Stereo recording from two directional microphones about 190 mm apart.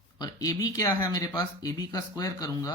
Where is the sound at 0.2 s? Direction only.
20° left (ahead or behind).